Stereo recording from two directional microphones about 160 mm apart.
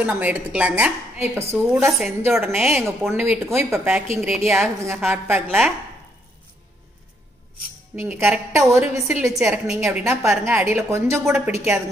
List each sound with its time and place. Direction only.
0.0 s a woman's voice: 10° right (ahead or behind)
1.7 s a woman's voice: centre (ahead or behind)
2.5 s a woman's voice: 15° right (ahead or behind)
7.9 s a woman's voice: 15° right (ahead or behind)
9.4 s a woman's voice: centre (ahead or behind)
10.0 s a woman's voice: 15° right (ahead or behind)